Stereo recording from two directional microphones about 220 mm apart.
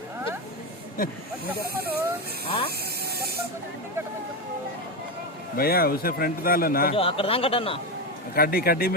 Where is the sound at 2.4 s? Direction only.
25° left (ahead or behind).